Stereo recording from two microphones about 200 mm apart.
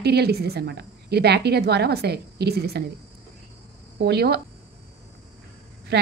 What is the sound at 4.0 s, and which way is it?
Speech, 55° right (ahead or behind).